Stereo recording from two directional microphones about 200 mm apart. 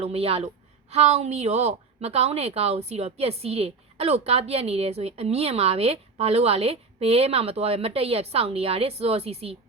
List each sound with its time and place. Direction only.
0.0 s a woman's voice: 30° right (ahead or behind)